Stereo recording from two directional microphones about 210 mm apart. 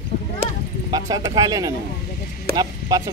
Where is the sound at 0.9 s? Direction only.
20° right (ahead or behind).